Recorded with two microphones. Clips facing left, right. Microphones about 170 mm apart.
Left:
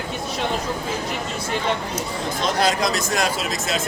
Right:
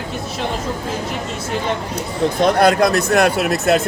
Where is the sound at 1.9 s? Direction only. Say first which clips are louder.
Right 7 dB; 60° right (ahead or behind).